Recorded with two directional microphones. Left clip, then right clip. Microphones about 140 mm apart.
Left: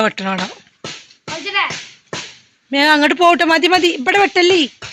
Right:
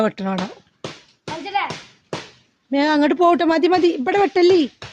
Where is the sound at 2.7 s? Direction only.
15° right (ahead or behind).